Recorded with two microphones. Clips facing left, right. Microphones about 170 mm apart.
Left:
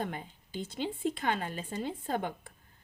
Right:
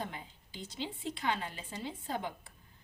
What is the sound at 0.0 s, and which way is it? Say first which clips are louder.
A woman's voice: left 5 dB; 55° left (ahead or behind).